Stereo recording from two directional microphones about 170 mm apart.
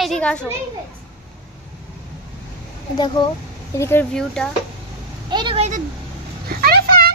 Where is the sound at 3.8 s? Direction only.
10° left (ahead or behind).